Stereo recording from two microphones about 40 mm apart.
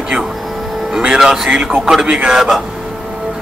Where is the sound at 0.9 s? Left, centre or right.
Centre.